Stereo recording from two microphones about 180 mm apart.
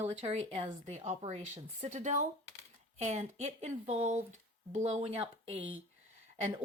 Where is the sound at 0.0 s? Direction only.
35° right (ahead or behind).